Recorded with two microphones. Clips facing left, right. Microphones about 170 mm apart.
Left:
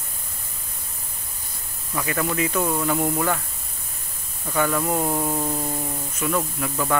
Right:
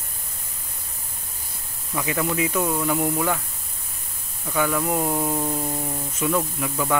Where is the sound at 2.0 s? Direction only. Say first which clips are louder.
Even; 15° right (ahead or behind).